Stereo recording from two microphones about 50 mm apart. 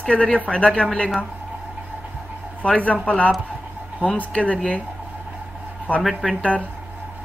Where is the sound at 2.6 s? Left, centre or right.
Left.